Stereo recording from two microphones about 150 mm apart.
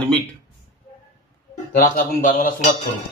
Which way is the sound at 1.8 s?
65° left (ahead or behind).